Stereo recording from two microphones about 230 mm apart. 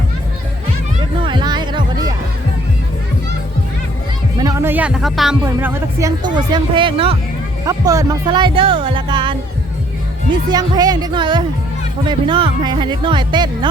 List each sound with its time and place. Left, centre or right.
1.2 s music: centre
4.4 s speech: centre
10.5 s speech: centre